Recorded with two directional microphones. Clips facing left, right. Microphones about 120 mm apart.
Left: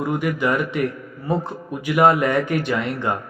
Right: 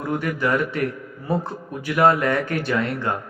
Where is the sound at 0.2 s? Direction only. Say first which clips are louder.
Left 1 dB; 15° left (ahead or behind).